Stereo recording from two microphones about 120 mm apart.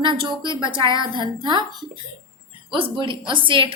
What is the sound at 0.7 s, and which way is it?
Speech, 40° right (ahead or behind).